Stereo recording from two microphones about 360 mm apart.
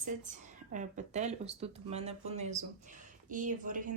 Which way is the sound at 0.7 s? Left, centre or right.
Right.